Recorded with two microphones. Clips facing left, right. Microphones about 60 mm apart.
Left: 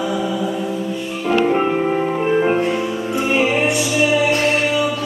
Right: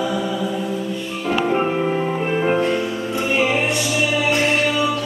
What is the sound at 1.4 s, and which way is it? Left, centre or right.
Music, centre.